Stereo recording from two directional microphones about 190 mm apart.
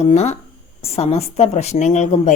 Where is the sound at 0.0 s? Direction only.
35° left (ahead or behind).